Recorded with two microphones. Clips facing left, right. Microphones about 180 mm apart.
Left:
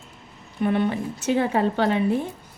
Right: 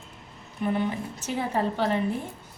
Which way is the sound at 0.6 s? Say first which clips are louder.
Left 5 dB; 75° left (ahead or behind).